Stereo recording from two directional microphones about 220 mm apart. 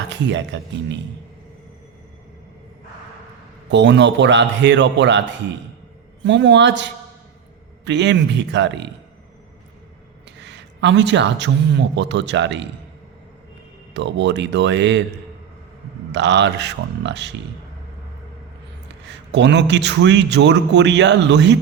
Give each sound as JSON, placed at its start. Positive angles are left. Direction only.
{"t": 0.1, "sound": "a man's voice", "side_deg": -55}
{"t": 3.7, "sound": "a man's voice", "side_deg": -55}
{"t": 6.2, "sound": "a man's voice", "side_deg": -55}
{"t": 10.3, "sound": "speech", "side_deg": -50}
{"t": 13.9, "sound": "a man's voice", "side_deg": -55}
{"t": 16.1, "sound": "a man's voice", "side_deg": -50}
{"t": 19.0, "sound": "a man's voice", "side_deg": -50}